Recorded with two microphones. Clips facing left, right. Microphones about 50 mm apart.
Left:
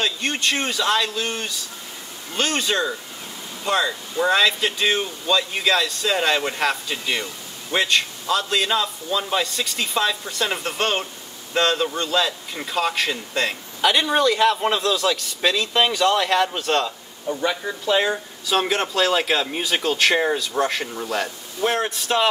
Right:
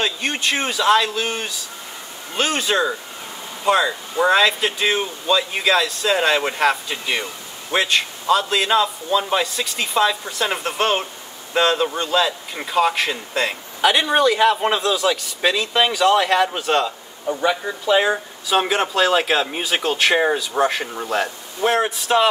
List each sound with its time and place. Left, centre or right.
0.0 s speech: centre